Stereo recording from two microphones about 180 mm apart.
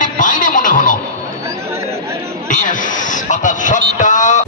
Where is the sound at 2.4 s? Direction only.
45° left (ahead or behind).